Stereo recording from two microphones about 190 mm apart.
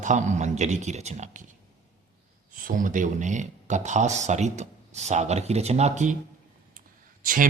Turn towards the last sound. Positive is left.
turn(degrees=-45)  # may be behind; listen again after turning